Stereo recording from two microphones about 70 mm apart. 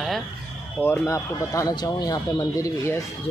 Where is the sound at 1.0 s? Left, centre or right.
Left.